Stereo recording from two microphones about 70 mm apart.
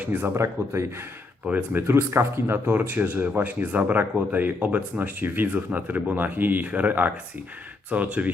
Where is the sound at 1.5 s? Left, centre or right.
Right.